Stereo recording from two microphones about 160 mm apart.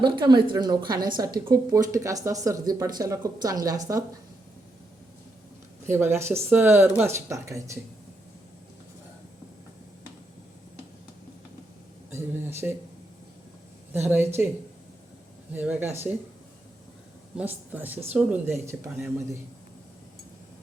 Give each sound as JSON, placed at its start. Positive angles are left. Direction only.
{"t": 0.0, "sound": "speech", "side_deg": -30}
{"t": 5.8, "sound": "speech", "side_deg": -15}
{"t": 12.1, "sound": "speech", "side_deg": -15}
{"t": 13.9, "sound": "speech", "side_deg": -15}
{"t": 15.5, "sound": "speech", "side_deg": -10}
{"t": 17.3, "sound": "speech", "side_deg": -10}